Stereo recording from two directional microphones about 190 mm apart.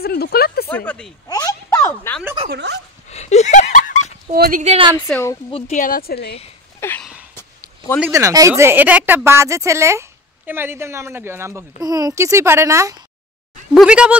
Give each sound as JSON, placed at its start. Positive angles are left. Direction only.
{"t": 0.0, "sound": "a sound", "side_deg": 55}
{"t": 0.7, "sound": "speech", "side_deg": 10}
{"t": 1.3, "sound": "a sound", "side_deg": 15}
{"t": 2.5, "sound": "speech", "side_deg": -65}
{"t": 3.1, "sound": "a sound", "side_deg": 35}
{"t": 4.3, "sound": "speech", "side_deg": -45}
{"t": 4.7, "sound": "a woman's voice", "side_deg": -25}
{"t": 5.0, "sound": "a woman's voice", "side_deg": 15}
{"t": 5.5, "sound": "speech", "side_deg": 40}
{"t": 6.8, "sound": "a sound", "side_deg": 10}
{"t": 8.0, "sound": "a woman's voice", "side_deg": -15}
{"t": 13.7, "sound": "speech", "side_deg": -5}